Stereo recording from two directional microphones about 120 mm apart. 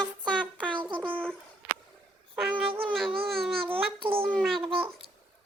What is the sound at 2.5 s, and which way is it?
Speech, 45° right (ahead or behind).